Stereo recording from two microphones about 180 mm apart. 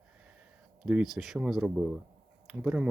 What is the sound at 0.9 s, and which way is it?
Speech, 5° right (ahead or behind).